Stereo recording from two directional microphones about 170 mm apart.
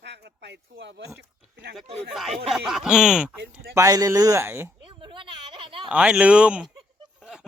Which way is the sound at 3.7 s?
20° right (ahead or behind).